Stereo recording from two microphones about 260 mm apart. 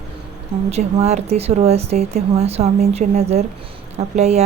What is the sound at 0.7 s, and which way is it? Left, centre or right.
Speech, right.